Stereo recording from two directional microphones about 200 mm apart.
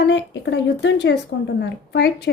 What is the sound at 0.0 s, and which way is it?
Speech, 60° left (ahead or behind).